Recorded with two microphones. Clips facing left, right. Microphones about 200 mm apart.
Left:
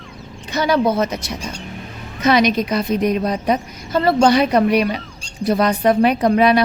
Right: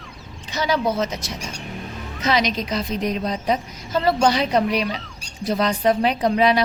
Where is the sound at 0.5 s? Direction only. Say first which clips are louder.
Left 5 dB; 60° left (ahead or behind).